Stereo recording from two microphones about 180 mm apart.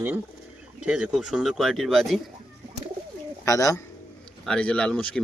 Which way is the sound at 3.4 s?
20° left (ahead or behind).